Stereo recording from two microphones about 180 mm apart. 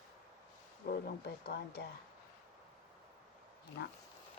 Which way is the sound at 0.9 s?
60° left (ahead or behind).